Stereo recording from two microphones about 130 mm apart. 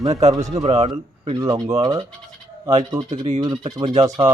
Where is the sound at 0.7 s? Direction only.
40° right (ahead or behind).